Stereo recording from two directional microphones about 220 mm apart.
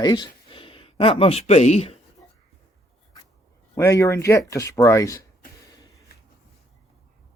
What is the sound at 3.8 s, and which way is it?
Speech, 15° left (ahead or behind).